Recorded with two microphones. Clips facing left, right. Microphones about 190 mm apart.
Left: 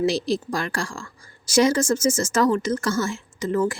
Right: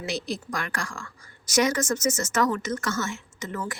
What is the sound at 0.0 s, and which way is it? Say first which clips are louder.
A woman's voice: left 9 dB; 35° left (ahead or behind).